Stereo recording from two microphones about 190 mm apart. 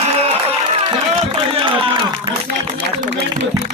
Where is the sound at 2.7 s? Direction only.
60° right (ahead or behind).